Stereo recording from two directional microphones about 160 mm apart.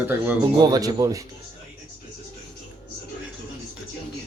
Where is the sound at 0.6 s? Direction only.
25° right (ahead or behind).